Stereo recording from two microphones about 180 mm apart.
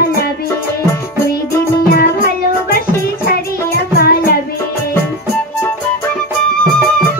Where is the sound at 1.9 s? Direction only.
55° left (ahead or behind).